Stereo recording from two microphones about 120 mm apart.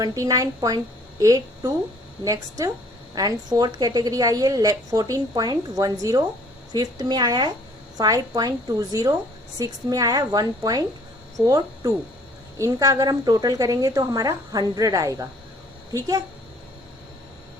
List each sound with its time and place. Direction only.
0.0 s a woman's voice: 30° right (ahead or behind)